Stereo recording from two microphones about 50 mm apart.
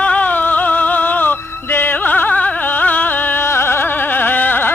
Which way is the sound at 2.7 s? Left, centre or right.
Left.